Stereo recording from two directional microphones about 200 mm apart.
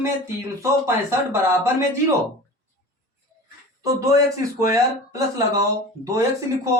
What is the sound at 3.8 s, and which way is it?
Speech, 15° right (ahead or behind).